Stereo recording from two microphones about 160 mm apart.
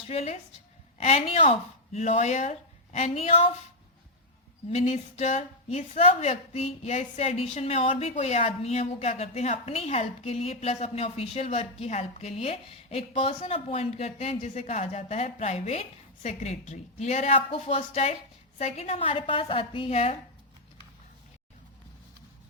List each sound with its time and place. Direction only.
0.1 s speech: 40° left (ahead or behind)
4.7 s speech: 45° left (ahead or behind)